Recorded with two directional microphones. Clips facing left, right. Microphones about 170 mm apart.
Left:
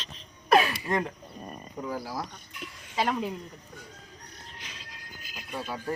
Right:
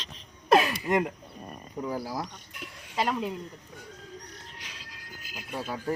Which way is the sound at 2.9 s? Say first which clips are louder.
Even; centre (ahead or behind).